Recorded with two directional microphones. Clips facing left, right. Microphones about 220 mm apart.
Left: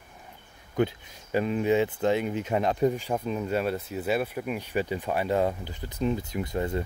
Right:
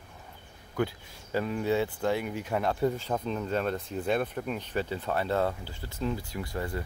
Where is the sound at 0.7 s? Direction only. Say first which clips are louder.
Left 4 dB; 20° left (ahead or behind).